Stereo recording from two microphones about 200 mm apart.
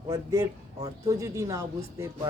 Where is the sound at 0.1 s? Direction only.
15° right (ahead or behind).